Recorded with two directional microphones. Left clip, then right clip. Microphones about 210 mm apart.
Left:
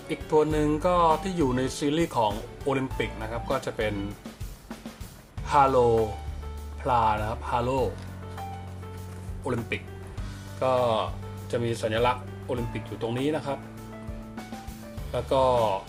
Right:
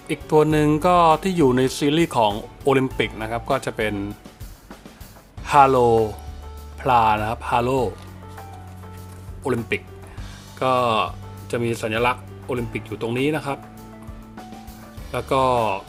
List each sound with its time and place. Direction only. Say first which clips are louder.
0.1 s speech: right 6 dB; 40° right (ahead or behind)
5.5 s speech: right 6 dB; 35° right (ahead or behind)
9.4 s speech: right 7 dB; 40° right (ahead or behind)
15.1 s speech: right 4 dB; 40° right (ahead or behind)